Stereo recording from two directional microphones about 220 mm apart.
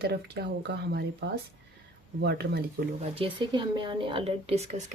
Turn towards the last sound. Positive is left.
turn(degrees=-30)  # may be behind; listen again after turning